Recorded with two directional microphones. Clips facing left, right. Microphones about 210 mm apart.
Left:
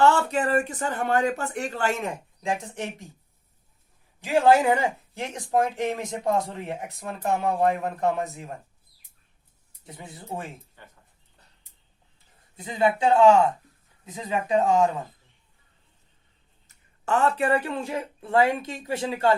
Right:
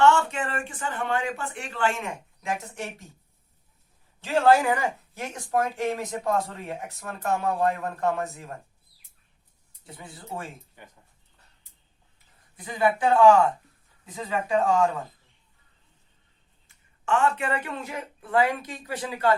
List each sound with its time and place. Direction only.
0.0 s speech: 35° left (ahead or behind)
4.2 s speech: 15° left (ahead or behind)
9.8 s speech: 20° left (ahead or behind)
10.8 s speech: 15° right (ahead or behind)
12.5 s speech: 20° left (ahead or behind)
16.6 s speech: 35° left (ahead or behind)